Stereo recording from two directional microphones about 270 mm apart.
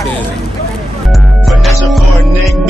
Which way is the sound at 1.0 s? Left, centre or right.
Centre.